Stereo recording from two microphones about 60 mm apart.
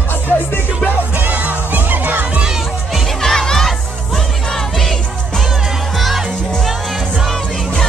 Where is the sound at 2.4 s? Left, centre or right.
Centre.